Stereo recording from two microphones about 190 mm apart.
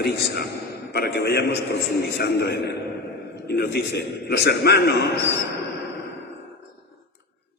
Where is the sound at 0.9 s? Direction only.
60° left (ahead or behind).